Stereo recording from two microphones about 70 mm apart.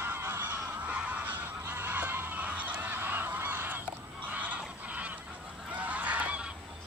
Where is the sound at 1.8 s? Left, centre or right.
Right.